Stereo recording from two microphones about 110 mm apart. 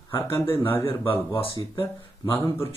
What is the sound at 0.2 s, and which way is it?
Speech, 25° left (ahead or behind).